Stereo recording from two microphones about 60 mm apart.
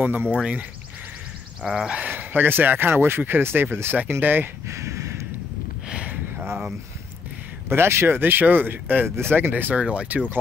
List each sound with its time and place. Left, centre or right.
0.0 s speech: right
1.6 s speech: centre
1.9 s speech: right
4.6 s a sound: right
5.9 s a sound: centre
6.4 s speech: centre
7.7 s speech: right